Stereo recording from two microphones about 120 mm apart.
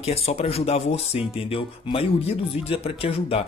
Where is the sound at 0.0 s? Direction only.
60° left (ahead or behind).